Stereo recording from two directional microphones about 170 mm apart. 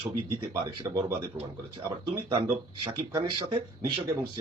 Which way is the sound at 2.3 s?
30° right (ahead or behind).